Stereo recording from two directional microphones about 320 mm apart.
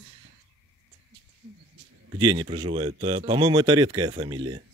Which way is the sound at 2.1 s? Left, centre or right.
Centre.